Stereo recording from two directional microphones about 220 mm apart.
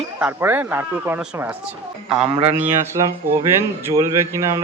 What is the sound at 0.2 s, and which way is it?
Speech, 10° right (ahead or behind).